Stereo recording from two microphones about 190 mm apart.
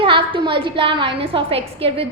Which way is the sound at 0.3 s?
25° right (ahead or behind).